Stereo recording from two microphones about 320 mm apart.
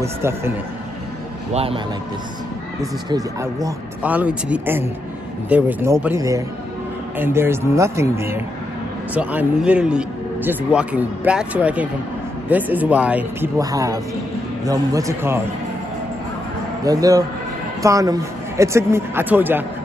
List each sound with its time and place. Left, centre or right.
0.0 s a man's voice: centre
1.5 s a man's voice: centre
3.1 s a man's voice: centre
16.8 s a man's voice: centre